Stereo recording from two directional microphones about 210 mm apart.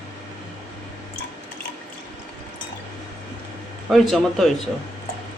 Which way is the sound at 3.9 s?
Centre (ahead or behind).